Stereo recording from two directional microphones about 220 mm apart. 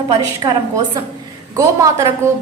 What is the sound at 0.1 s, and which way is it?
A woman's voice, 20° right (ahead or behind).